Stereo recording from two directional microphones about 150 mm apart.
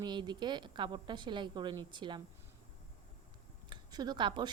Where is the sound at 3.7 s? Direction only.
25° right (ahead or behind).